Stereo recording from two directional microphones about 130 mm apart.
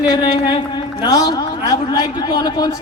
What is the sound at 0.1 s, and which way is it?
A man's voice, 35° left (ahead or behind).